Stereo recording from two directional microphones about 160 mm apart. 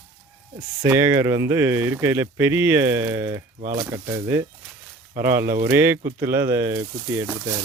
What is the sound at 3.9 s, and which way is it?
Speech, 25° right (ahead or behind).